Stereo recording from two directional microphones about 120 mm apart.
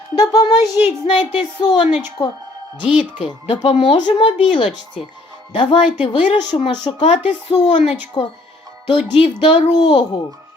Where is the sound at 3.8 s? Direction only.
40° left (ahead or behind).